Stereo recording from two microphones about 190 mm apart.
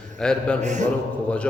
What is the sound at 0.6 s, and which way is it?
Speech, 40° right (ahead or behind).